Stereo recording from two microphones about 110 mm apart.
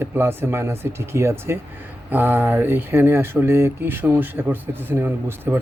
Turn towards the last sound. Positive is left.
turn(degrees=-20)  # may be behind; listen again after turning